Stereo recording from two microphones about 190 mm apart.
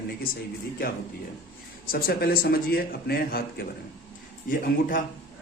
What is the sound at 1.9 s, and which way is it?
Speech, 50° left (ahead or behind).